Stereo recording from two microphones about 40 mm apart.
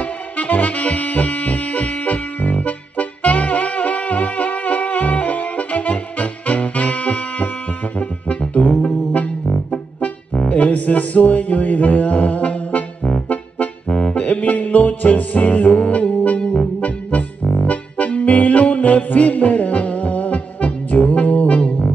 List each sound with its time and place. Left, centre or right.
0.0 s music: left
10.6 s mantra: left
13.9 s music: left
14.2 s music: left